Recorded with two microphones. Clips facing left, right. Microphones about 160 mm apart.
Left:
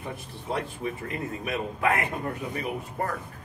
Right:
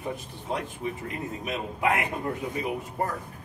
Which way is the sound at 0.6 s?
20° right (ahead or behind).